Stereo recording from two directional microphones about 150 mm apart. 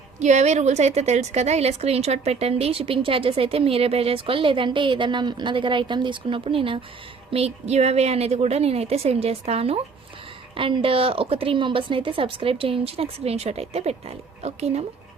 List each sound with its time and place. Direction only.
0.2 s a woman's voice: 50° right (ahead or behind)